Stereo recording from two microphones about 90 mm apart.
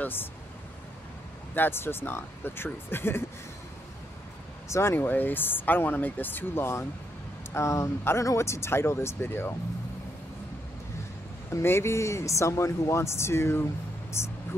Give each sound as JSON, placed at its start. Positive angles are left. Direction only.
{"t": 0.0, "sound": "speech", "side_deg": 20}
{"t": 1.5, "sound": "speech", "side_deg": 25}
{"t": 4.6, "sound": "speech", "side_deg": 30}
{"t": 11.5, "sound": "speech", "side_deg": 30}